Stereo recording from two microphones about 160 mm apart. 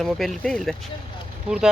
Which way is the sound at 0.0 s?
Centre (ahead or behind).